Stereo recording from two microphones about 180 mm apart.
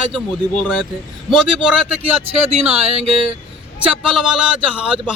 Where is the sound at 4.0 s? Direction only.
5° right (ahead or behind).